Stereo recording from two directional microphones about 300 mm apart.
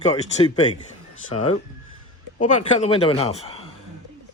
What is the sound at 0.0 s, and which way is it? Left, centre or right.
Speech, left.